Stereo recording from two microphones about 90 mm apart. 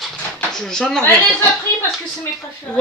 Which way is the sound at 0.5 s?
5° left (ahead or behind).